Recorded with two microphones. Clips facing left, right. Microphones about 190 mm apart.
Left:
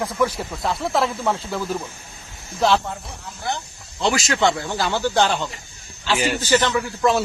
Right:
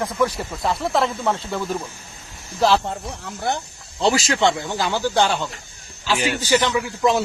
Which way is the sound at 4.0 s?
35° right (ahead or behind).